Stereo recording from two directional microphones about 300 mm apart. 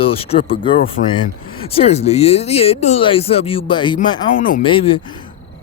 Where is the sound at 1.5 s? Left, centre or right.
Centre.